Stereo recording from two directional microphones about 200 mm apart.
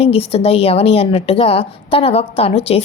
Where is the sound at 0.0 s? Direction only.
30° left (ahead or behind).